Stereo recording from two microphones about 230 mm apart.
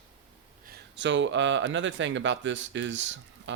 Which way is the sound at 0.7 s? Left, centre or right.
Right.